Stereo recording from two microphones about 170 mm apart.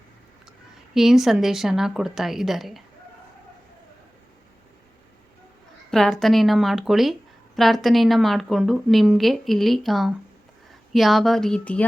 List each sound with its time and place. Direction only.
0.9 s a woman's voice: centre (ahead or behind)
5.9 s a woman's voice: centre (ahead or behind)